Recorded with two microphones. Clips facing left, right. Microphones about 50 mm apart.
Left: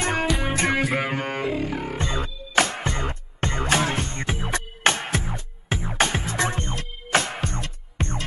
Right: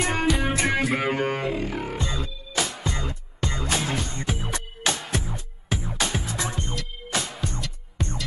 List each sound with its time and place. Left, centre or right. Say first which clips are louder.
0.1 s music: even; centre
2.0 s music: left 2 dB; left